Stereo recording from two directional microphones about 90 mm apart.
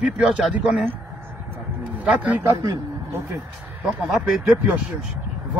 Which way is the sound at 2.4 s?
40° right (ahead or behind).